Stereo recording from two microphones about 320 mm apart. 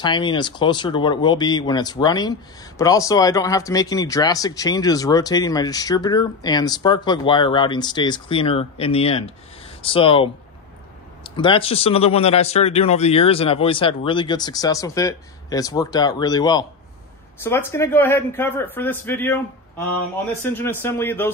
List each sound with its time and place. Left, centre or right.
0.0 s speech: centre
11.3 s speech: centre
20.4 s speech: centre